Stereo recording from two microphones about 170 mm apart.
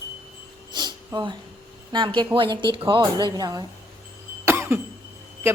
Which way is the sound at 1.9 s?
25° right (ahead or behind).